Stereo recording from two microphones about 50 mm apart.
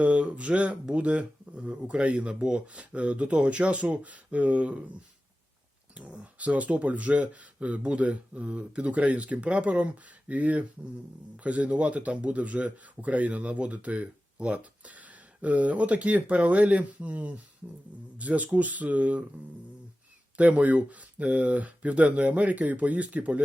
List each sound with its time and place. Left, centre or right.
0.0 s speech: right
5.9 s speech: right
20.3 s speech: right